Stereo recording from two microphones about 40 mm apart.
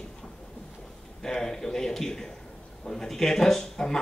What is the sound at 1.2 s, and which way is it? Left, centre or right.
Speech, centre.